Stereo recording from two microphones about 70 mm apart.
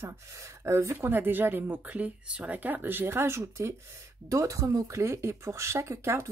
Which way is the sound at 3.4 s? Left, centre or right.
Right.